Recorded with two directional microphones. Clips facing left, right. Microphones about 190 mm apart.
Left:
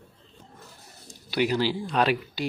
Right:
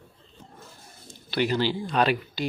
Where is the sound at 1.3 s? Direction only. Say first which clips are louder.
Even; 5° left (ahead or behind).